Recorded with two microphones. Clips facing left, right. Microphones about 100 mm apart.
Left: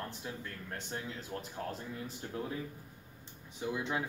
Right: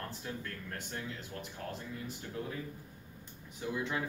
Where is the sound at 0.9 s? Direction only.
35° left (ahead or behind).